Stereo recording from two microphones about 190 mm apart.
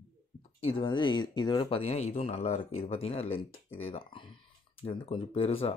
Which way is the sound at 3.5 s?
90° left.